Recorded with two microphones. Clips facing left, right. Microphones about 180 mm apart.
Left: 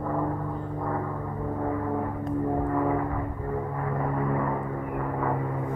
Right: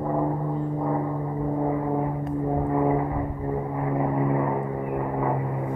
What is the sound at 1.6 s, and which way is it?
Vehicle, 15° right (ahead or behind).